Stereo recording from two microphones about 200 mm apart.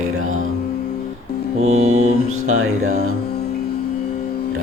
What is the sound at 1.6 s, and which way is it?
Music, 35° right (ahead or behind).